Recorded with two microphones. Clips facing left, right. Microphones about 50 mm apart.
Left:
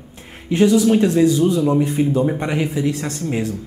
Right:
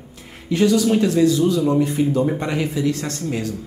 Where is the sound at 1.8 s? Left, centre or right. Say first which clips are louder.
Left 1 dB; left.